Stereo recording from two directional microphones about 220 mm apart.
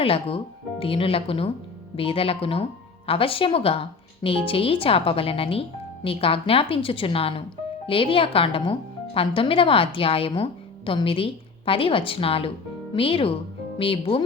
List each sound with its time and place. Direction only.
0.0 s speech: 25° left (ahead or behind)